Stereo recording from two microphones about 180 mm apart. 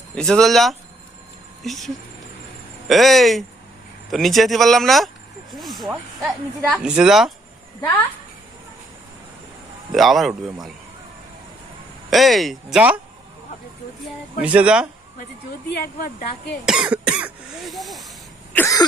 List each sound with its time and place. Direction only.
0.2 s speech: 5° left (ahead or behind)
7.8 s throat clearing: 10° left (ahead or behind)
9.9 s speech: centre (ahead or behind)
12.1 s speech: centre (ahead or behind)
14.4 s speech: 5° right (ahead or behind)
16.6 s speech: 5° right (ahead or behind)
18.5 s throat clearing: 15° left (ahead or behind)